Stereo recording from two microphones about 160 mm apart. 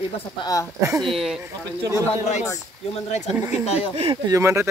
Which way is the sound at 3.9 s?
40° right (ahead or behind).